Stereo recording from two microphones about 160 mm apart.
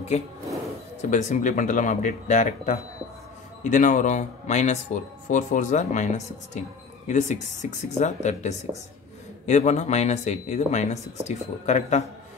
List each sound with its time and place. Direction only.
0.1 s speech: 45° left (ahead or behind)
1.3 s speech: 50° left (ahead or behind)